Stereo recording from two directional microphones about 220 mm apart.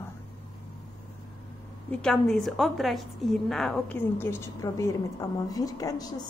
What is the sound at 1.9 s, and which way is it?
A woman's voice, 5° left (ahead or behind).